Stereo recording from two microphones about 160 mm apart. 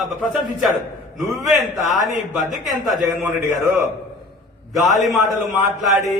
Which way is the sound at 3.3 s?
15° right (ahead or behind).